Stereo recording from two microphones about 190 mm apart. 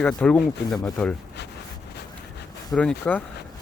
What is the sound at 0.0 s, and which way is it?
Speech, 5° left (ahead or behind).